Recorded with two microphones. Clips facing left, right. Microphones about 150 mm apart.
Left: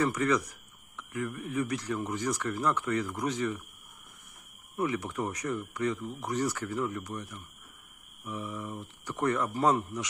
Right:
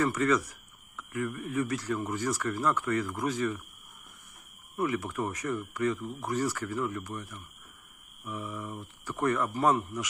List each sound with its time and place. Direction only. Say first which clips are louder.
0.0 s speech: right 1 dB; 15° left (ahead or behind)
4.7 s speech: right 1 dB; 20° left (ahead or behind)